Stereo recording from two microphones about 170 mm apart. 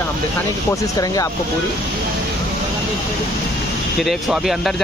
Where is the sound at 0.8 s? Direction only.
20° left (ahead or behind).